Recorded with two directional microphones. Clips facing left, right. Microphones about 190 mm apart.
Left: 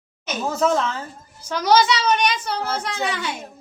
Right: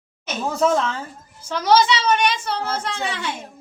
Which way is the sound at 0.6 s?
Centre (ahead or behind).